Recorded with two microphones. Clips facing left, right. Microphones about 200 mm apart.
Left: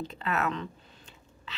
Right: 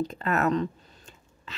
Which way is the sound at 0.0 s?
45° right (ahead or behind).